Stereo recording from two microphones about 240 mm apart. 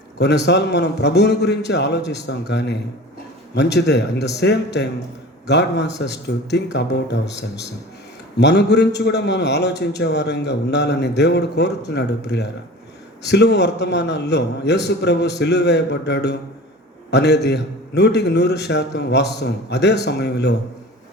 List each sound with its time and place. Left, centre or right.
0.2 s a man's voice: left